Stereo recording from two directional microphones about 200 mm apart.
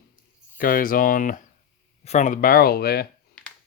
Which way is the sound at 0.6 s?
45° left (ahead or behind).